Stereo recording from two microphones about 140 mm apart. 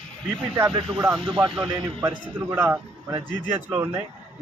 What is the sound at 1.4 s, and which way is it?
Speech, 20° right (ahead or behind).